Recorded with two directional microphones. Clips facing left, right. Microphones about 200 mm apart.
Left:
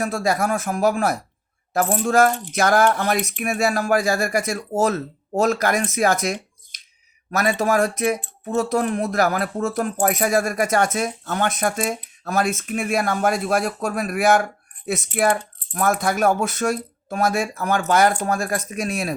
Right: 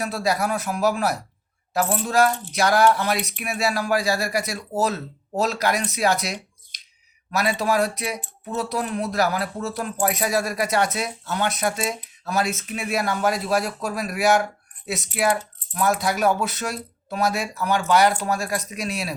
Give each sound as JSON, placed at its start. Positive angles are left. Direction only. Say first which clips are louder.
{"t": 0.0, "sound": "speech", "louder": "left 2 dB", "side_deg": 50}